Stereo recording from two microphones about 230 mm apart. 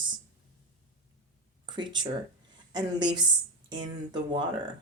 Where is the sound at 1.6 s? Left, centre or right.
Centre.